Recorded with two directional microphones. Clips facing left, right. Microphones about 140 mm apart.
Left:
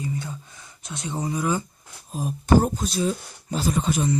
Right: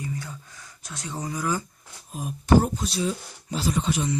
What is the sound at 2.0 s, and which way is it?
Speech, 30° left (ahead or behind).